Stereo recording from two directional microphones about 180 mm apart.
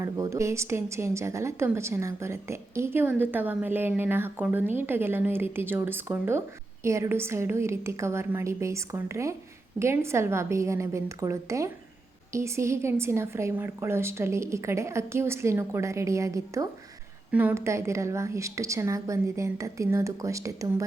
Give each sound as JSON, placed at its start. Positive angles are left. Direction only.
{"t": 0.0, "sound": "a woman's voice", "side_deg": -15}